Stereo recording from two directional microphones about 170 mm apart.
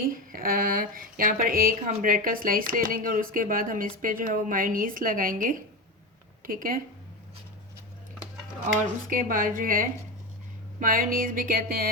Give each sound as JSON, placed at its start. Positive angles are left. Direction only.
{"t": 0.0, "sound": "speech", "side_deg": -55}
{"t": 8.6, "sound": "speech", "side_deg": -50}